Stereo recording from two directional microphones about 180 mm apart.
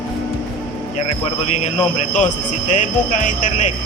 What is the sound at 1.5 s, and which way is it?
Speech, 35° left (ahead or behind).